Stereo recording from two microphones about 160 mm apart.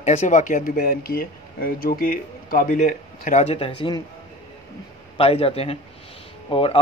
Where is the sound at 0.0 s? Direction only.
50° left (ahead or behind).